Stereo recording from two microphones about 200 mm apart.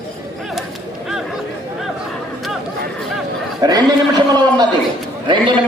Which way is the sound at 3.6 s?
20° right (ahead or behind).